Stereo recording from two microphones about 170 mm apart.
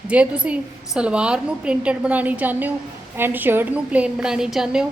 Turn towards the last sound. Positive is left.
turn(degrees=-5)  # may be behind; listen again after turning